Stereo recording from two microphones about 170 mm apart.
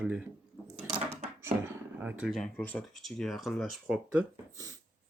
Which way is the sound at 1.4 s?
10° right (ahead or behind).